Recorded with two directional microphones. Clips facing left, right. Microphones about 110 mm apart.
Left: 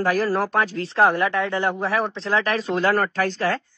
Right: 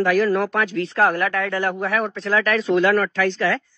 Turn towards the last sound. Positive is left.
turn(degrees=40)  # may be behind; listen again after turning